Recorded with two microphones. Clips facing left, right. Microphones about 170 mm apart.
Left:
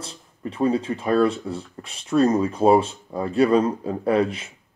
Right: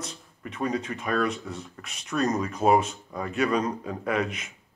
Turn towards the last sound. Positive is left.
turn(degrees=30)  # may be behind; listen again after turning